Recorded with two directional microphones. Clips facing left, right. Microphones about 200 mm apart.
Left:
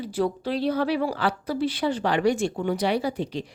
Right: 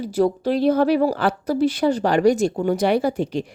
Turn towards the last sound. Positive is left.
turn(degrees=-45)  # may be behind; listen again after turning